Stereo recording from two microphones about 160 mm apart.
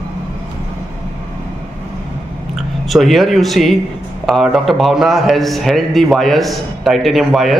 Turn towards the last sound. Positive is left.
turn(degrees=0)  # may be behind; listen again after turning